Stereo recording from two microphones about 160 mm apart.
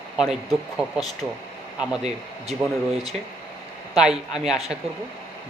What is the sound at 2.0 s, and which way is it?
Speech, 40° right (ahead or behind).